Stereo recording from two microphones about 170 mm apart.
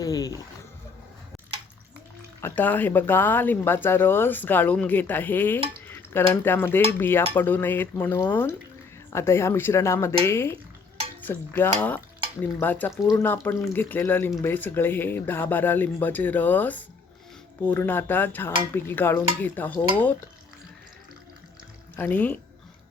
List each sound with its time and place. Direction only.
0.0 s music: 20° left (ahead or behind)
2.4 s speech: 10° left (ahead or behind)
21.9 s speech: 10° left (ahead or behind)